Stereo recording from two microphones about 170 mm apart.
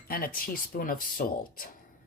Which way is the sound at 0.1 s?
55° left (ahead or behind).